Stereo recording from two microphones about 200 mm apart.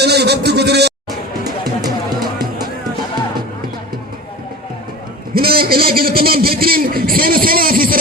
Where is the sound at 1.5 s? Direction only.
20° right (ahead or behind).